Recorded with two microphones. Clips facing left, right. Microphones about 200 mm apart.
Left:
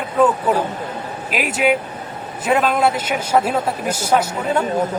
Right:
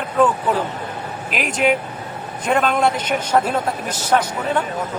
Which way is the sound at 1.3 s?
5° left (ahead or behind).